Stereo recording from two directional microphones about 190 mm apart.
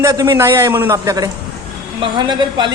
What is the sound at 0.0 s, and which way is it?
A man's voice, 15° right (ahead or behind).